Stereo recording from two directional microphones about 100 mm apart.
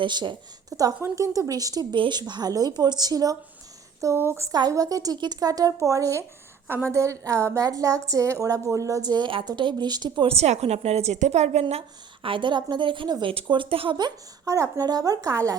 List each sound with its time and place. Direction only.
0.0 s a woman's voice: 50° right (ahead or behind)
0.7 s a woman's voice: 35° right (ahead or behind)
4.0 s speech: 25° right (ahead or behind)
4.5 s a woman's voice: 40° right (ahead or behind)
10.2 s a woman's voice: 90° right
12.2 s a woman's voice: 55° right (ahead or behind)
13.3 s speech: 60° right (ahead or behind)
13.9 s a woman's voice: 40° right (ahead or behind)